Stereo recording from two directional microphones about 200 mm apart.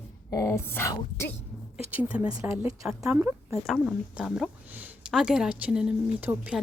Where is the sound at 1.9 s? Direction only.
5° right (ahead or behind).